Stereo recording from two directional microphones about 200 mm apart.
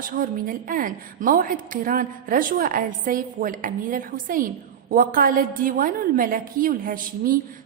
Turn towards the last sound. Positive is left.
turn(degrees=-45)  # may be behind; listen again after turning